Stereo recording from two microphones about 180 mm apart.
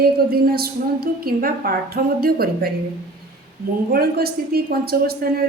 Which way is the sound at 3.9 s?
55° right (ahead or behind).